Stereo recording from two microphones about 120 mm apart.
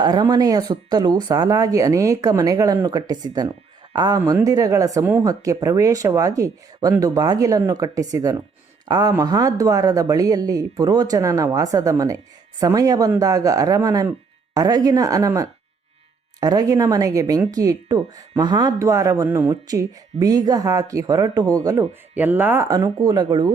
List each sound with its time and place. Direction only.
0.0 s speech: 35° right (ahead or behind)
22.1 s speech: 15° right (ahead or behind)
23.0 s speech: 35° right (ahead or behind)